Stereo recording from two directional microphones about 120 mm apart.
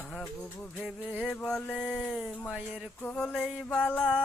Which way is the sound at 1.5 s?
5° left (ahead or behind).